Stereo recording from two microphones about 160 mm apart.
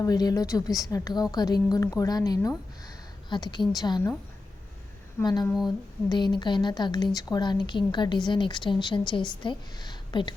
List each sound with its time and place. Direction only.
0.0 s a woman's voice: 25° left (ahead or behind)
2.8 s a sound: 25° left (ahead or behind)
3.8 s a woman's voice: 25° left (ahead or behind)
5.2 s a woman's voice: 25° left (ahead or behind)